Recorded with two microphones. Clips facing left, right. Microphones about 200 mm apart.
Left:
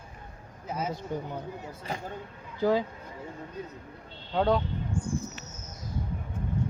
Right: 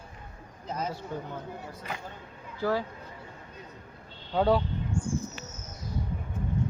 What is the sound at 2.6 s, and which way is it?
Speech, 20° left (ahead or behind).